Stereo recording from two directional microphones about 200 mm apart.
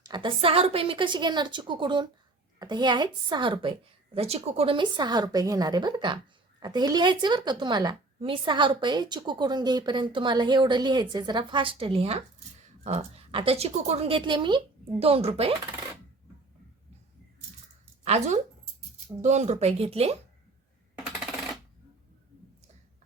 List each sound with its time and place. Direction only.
0.0 s a woman's voice: 25° right (ahead or behind)
18.0 s speech: 35° right (ahead or behind)